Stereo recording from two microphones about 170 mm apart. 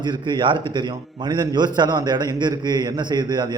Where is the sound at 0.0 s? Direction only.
25° right (ahead or behind).